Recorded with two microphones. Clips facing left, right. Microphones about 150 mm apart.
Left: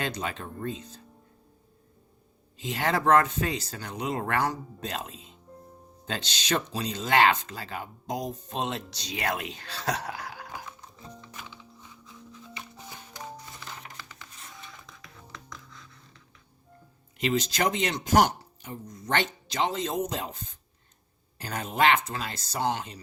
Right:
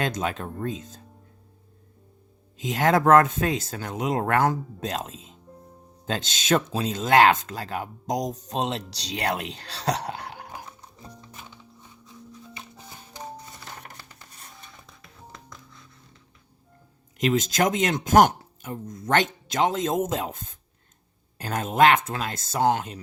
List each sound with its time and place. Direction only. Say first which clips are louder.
0.0 s speech: right 5 dB; 45° right (ahead or behind)
2.6 s speech: right 6 dB; 45° right (ahead or behind); by 10.2 s 30° right (ahead or behind)
11.9 s music: right 4 dB; 30° right (ahead or behind)
17.2 s speech: right 4 dB; 45° right (ahead or behind)